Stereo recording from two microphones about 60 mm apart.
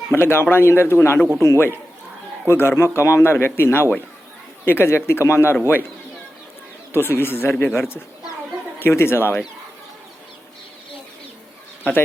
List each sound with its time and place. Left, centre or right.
0.1 s speech: left
6.9 s speech: left
11.8 s speech: left